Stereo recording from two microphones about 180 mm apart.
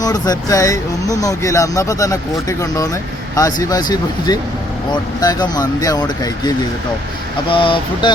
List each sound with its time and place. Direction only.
0.0 s speech: 20° left (ahead or behind)
7.5 s speech: 30° left (ahead or behind)